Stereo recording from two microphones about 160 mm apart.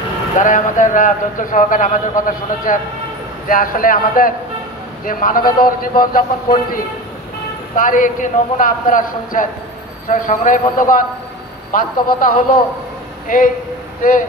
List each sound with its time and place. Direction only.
0.4 s a man's voice: 55° left (ahead or behind)